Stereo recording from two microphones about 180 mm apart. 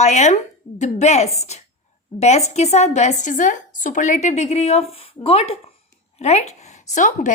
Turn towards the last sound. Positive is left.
turn(degrees=45)  # may be behind; listen again after turning